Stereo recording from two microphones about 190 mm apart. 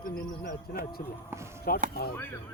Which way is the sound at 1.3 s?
15° right (ahead or behind).